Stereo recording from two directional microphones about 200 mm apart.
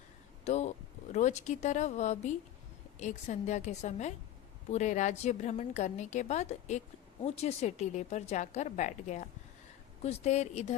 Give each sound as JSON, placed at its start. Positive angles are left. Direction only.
{"t": 0.4, "sound": "a woman's voice", "side_deg": 35}